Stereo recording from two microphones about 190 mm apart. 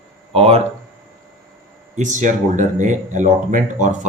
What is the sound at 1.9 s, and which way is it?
Speech, 40° right (ahead or behind).